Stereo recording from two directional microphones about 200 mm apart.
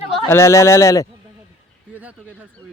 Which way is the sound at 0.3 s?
15° left (ahead or behind).